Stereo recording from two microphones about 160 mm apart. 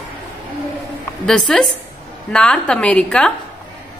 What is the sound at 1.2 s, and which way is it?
A woman's voice, centre (ahead or behind).